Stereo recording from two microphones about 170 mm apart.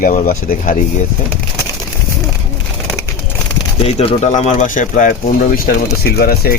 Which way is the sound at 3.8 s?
35° left (ahead or behind).